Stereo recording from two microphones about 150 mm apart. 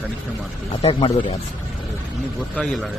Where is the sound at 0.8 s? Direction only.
40° left (ahead or behind).